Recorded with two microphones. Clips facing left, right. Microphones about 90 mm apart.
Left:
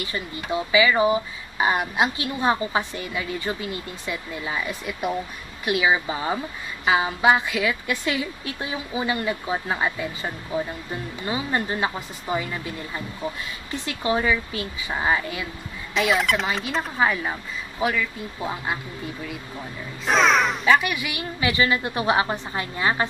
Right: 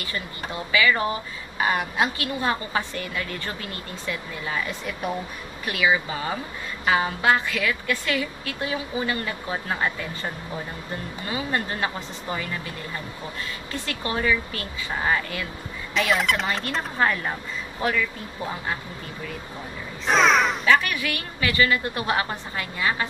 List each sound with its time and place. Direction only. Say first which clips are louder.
0.0 s speech: left 2 dB; 20° left (ahead or behind)
5.7 s a woman's voice: left 2 dB; 20° left (ahead or behind)
6.9 s speech: left 2 dB; 10° left (ahead or behind)
11.2 s speech: left 2 dB; 20° left (ahead or behind)
13.7 s speech: left 6 dB; 15° left (ahead or behind)
15.9 s speech: left 1 dB; centre (ahead or behind)
20.1 s speech: even; centre (ahead or behind)
20.6 s a woman's voice: left 1 dB; 10° left (ahead or behind); by 23.0 s 30° left (ahead or behind)